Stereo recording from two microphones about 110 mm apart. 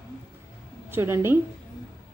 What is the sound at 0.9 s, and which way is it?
Speech, 20° right (ahead or behind).